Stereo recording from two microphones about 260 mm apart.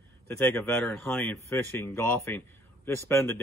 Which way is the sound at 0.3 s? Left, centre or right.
Centre.